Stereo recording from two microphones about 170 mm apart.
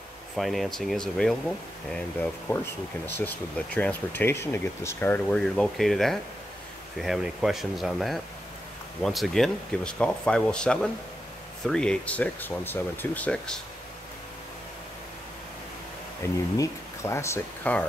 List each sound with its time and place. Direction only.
0.4 s speech: centre (ahead or behind)
16.2 s speech: 15° left (ahead or behind)